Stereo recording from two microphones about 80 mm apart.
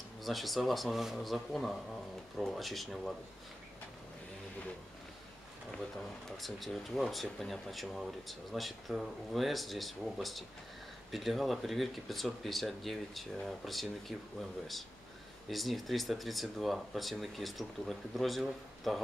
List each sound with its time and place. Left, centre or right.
0.2 s speech: centre
6.2 s speech: centre
15.5 s speech: centre